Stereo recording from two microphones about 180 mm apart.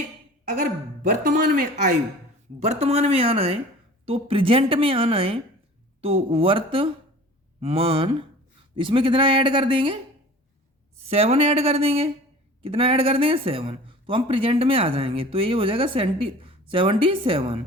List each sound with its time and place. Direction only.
1.2 s a woman's voice: 50° right (ahead or behind); by 10.0 s 25° right (ahead or behind)
11.1 s a woman's voice: 35° right (ahead or behind)